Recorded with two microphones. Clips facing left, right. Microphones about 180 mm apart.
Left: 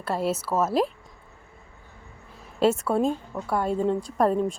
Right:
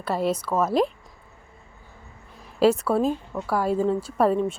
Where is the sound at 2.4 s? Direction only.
Centre (ahead or behind).